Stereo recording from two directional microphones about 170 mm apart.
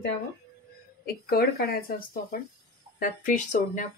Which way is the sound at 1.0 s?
65° left (ahead or behind).